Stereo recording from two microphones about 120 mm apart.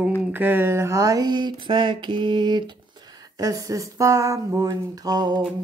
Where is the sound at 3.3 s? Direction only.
30° right (ahead or behind).